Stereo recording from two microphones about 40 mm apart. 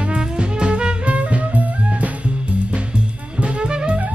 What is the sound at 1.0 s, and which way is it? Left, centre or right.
Music, right.